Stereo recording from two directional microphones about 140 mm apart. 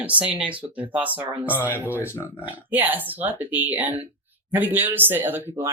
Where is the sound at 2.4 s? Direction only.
10° right (ahead or behind).